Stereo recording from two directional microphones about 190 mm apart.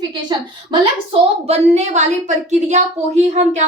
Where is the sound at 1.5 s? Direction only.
35° right (ahead or behind).